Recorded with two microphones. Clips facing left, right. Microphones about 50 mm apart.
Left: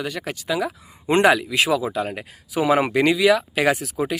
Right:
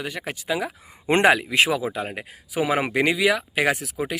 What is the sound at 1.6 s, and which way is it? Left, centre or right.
Speech, right.